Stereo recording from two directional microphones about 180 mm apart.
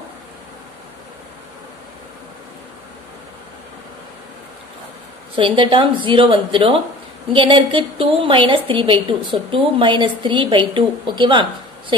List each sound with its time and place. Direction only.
5.3 s a woman's voice: 30° right (ahead or behind)